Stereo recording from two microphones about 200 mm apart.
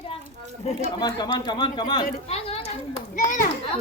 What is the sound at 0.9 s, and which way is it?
Speech, 20° left (ahead or behind).